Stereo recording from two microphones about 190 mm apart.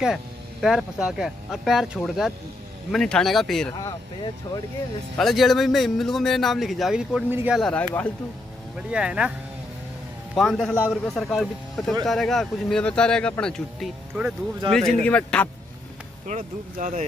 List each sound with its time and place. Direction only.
0.0 s speech: 5° right (ahead or behind)
3.8 s speech: 20° left (ahead or behind)
5.1 s speech: centre (ahead or behind)
8.9 s speech: 5° right (ahead or behind)
10.3 s speech: centre (ahead or behind)
16.3 s speech: 40° right (ahead or behind)